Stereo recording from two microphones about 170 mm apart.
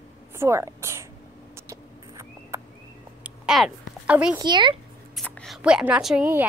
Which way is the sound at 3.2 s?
5° right (ahead or behind).